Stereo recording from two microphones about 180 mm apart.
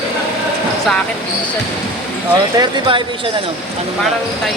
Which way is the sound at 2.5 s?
25° right (ahead or behind).